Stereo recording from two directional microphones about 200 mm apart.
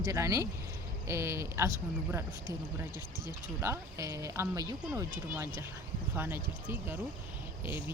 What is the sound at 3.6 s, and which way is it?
A woman's voice, 15° right (ahead or behind).